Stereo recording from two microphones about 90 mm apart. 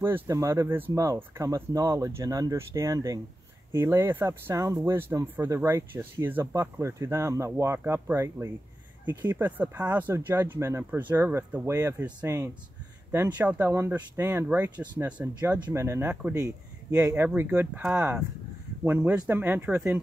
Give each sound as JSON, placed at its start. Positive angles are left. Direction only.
{"t": 0.0, "sound": "speech", "side_deg": -30}
{"t": 0.9, "sound": "speech", "side_deg": -40}
{"t": 9.3, "sound": "speech", "side_deg": -20}
{"t": 15.4, "sound": "speech", "side_deg": -30}
{"t": 17.4, "sound": "speech", "side_deg": -20}